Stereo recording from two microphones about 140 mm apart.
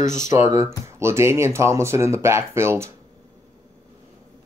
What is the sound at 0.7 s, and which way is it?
Speech, 20° right (ahead or behind).